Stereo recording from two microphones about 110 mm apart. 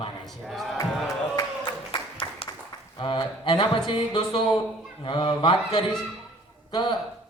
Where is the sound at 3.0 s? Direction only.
45° left (ahead or behind).